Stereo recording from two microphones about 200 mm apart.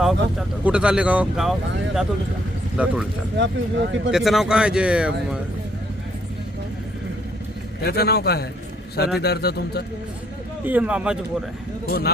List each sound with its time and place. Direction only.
0.0 s speech: centre (ahead or behind)
2.7 s speech: 5° right (ahead or behind)
3.3 s speech: 65° right (ahead or behind)
4.1 s speech: centre (ahead or behind)
7.9 s a man's voice: 55° left (ahead or behind)
10.7 s speech: 5° right (ahead or behind)
11.9 s a man's voice: 50° left (ahead or behind)